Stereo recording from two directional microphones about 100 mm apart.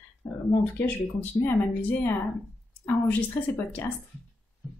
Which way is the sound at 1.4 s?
20° left (ahead or behind).